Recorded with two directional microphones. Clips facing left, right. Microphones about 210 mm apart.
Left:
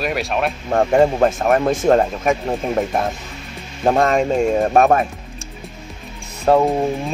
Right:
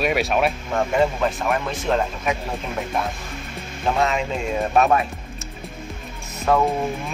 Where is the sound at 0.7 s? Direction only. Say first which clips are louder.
Left 8 dB; 45° left (ahead or behind).